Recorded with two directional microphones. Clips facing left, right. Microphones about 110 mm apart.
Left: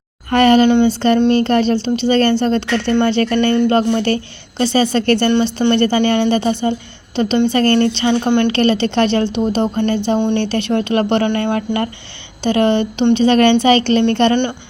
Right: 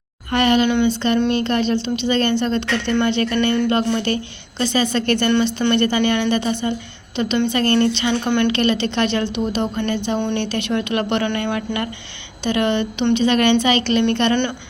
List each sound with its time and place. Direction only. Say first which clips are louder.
0.3 s speech: left 6 dB; 40° left (ahead or behind)
0.7 s a sound: left 5 dB; 30° left (ahead or behind)
1.3 s a woman's voice: left 5 dB; 40° left (ahead or behind)